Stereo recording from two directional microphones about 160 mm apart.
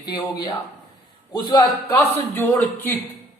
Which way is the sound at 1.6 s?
15° left (ahead or behind).